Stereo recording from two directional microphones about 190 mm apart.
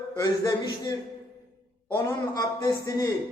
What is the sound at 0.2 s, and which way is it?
A man's voice, 20° left (ahead or behind).